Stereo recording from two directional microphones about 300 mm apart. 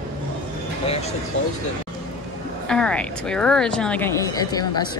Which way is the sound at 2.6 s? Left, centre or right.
Centre.